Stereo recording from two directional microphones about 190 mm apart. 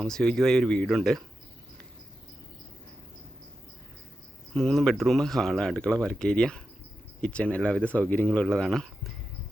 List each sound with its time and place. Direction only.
0.0 s speech: 5° left (ahead or behind)
4.5 s speech: 5° left (ahead or behind)